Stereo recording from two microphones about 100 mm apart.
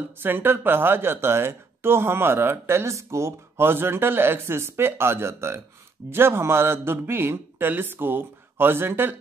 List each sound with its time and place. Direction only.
0.2 s speech: 20° right (ahead or behind)